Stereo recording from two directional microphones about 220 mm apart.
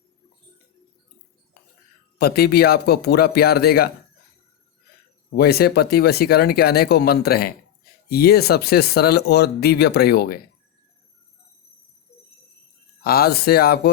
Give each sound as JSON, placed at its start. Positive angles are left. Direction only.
{"t": 2.1, "sound": "speech", "side_deg": 45}
{"t": 5.3, "sound": "speech", "side_deg": 45}
{"t": 13.0, "sound": "speech", "side_deg": 45}